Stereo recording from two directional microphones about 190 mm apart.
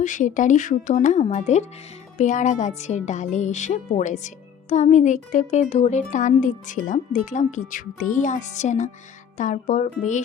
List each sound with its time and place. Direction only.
0.0 s speech: 40° left (ahead or behind)